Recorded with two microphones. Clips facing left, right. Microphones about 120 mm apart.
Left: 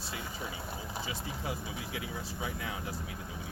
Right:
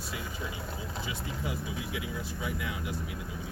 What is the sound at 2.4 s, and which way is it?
Speech, 30° left (ahead or behind).